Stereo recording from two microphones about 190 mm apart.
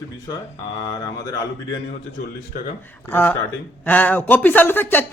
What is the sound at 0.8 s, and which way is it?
Speech, 20° left (ahead or behind).